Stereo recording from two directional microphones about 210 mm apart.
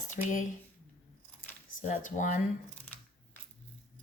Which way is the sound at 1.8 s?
40° left (ahead or behind).